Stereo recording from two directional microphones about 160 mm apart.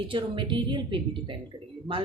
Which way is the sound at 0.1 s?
30° right (ahead or behind).